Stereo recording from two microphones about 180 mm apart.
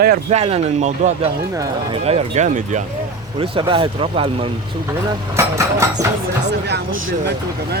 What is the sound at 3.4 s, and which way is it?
Speech, 30° right (ahead or behind).